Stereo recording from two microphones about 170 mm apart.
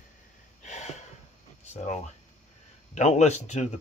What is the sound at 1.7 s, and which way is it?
Speech, 40° left (ahead or behind).